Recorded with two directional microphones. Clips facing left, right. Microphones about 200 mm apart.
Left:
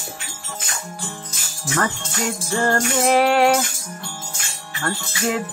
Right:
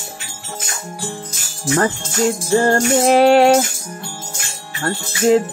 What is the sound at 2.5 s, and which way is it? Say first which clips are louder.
Music: right 5 dB; 35° right (ahead or behind).